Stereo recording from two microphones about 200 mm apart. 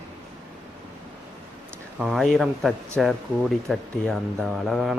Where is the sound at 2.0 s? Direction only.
Centre (ahead or behind).